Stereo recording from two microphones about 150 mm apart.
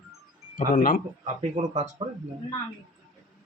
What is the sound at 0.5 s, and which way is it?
Speech, 70° left (ahead or behind).